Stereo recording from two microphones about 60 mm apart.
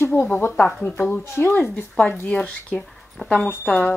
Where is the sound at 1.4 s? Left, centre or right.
Left.